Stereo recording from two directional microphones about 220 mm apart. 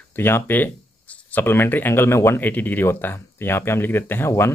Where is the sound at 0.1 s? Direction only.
10° left (ahead or behind).